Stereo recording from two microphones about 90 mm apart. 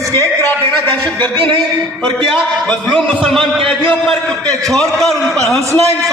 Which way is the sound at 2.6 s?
10° left (ahead or behind).